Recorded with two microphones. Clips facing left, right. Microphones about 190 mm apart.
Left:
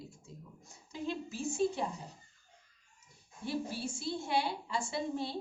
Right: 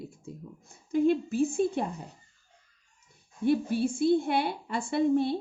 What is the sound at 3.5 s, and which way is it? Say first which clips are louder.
Speech: right 11 dB; 55° right (ahead or behind).